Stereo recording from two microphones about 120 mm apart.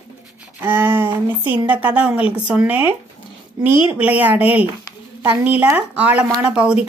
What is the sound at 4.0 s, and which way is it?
Speech, 15° right (ahead or behind).